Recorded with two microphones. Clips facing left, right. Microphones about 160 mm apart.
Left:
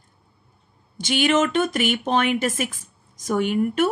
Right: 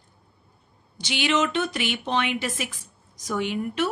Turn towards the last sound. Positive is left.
turn(degrees=50)  # may be behind; listen again after turning